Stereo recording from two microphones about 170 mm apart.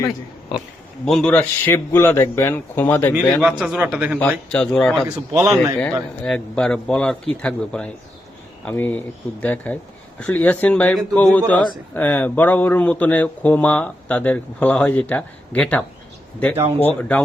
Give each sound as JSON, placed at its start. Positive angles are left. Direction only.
{"t": 1.0, "sound": "speech", "side_deg": 5}
{"t": 3.6, "sound": "a man's voice", "side_deg": -5}
{"t": 4.2, "sound": "a man's voice", "side_deg": 5}
{"t": 5.0, "sound": "speech", "side_deg": -20}
{"t": 5.8, "sound": "a man's voice", "side_deg": 5}
{"t": 16.8, "sound": "speech", "side_deg": 10}